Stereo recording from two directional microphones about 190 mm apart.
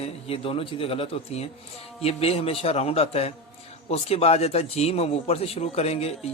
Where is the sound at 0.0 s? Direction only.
30° left (ahead or behind).